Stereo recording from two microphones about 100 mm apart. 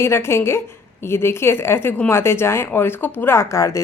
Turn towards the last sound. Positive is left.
turn(degrees=35)  # may be behind; listen again after turning